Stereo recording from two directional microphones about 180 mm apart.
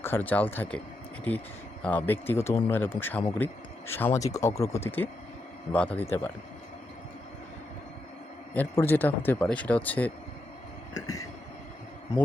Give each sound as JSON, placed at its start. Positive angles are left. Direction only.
{"t": 0.0, "sound": "speech", "side_deg": 10}
{"t": 1.8, "sound": "speech", "side_deg": 10}
{"t": 8.5, "sound": "speech", "side_deg": 10}
{"t": 10.9, "sound": "vehicle", "side_deg": 20}